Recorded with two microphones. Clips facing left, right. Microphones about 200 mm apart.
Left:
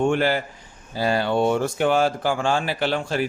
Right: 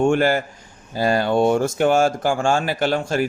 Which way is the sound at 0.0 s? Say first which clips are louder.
Right 3 dB; 45° right (ahead or behind).